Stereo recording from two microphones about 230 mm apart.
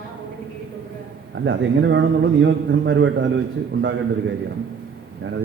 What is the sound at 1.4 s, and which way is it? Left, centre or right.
A man's voice, right.